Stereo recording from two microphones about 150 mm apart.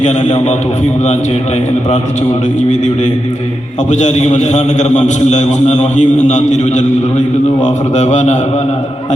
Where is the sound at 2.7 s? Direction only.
55° left (ahead or behind).